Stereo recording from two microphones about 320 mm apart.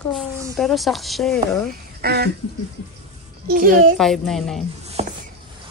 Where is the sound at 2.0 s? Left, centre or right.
Right.